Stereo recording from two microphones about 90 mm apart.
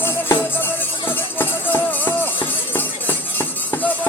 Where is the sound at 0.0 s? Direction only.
25° left (ahead or behind).